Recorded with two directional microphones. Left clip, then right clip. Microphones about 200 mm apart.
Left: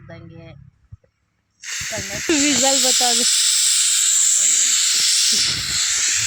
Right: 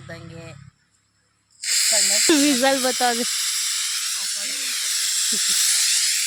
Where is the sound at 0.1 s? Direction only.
15° right (ahead or behind).